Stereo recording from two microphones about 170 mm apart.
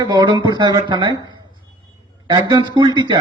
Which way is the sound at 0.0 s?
25° right (ahead or behind).